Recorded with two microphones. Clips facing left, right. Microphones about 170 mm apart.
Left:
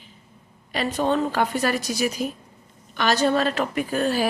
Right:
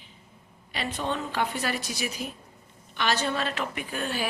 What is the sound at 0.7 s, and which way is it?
A woman's voice, 45° left (ahead or behind).